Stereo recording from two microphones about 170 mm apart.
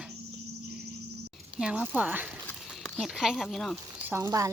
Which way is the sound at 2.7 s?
Centre (ahead or behind).